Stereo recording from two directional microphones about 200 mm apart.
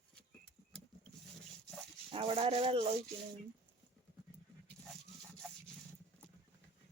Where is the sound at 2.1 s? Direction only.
25° right (ahead or behind).